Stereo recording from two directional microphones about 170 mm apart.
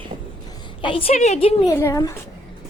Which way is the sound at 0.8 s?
35° left (ahead or behind).